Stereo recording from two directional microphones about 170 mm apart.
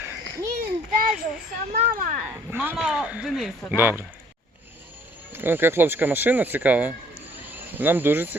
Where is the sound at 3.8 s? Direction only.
10° right (ahead or behind).